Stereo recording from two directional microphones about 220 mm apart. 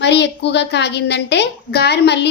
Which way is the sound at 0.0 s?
50° left (ahead or behind).